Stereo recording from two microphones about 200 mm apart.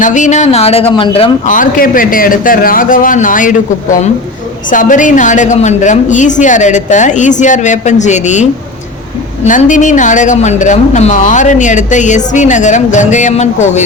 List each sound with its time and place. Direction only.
0.0 s speech: 40° left (ahead or behind)
1.5 s a man's voice: 40° left (ahead or behind)
9.5 s speech: 40° left (ahead or behind)